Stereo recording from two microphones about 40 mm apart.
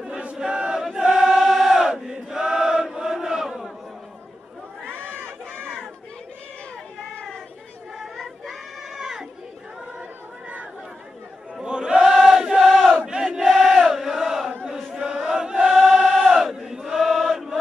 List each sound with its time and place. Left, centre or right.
0.1 s chant: right
0.9 s choir: centre
1.2 s chant: centre
4.8 s crowd: right
8.2 s a sound: centre
11.6 s chant: right
13.0 s battle cry: right
13.5 s chant: centre
15.2 s choir: centre
16.3 s battle cry: centre
16.5 s chant: centre